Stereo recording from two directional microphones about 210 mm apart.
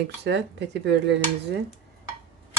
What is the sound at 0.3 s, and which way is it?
Speech, 55° right (ahead or behind).